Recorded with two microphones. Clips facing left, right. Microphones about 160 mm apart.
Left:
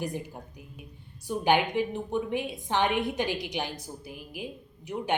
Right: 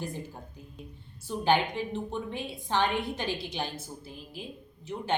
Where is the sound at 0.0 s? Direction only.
15° left (ahead or behind).